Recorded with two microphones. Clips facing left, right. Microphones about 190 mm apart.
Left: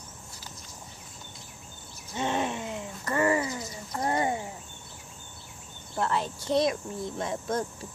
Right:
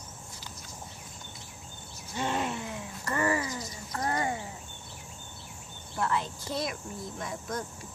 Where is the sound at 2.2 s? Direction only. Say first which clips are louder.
Left 2 dB; 20° left (ahead or behind).